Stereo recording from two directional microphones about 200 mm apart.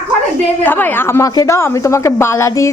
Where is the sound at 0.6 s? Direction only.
10° left (ahead or behind).